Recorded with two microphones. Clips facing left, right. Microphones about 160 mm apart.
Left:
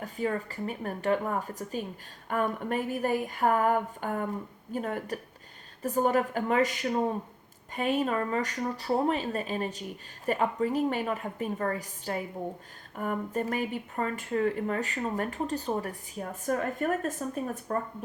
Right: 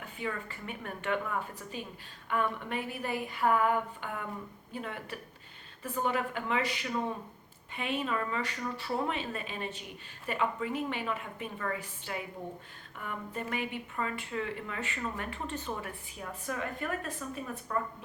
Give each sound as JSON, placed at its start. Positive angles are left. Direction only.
{"t": 0.0, "sound": "speech", "side_deg": 40}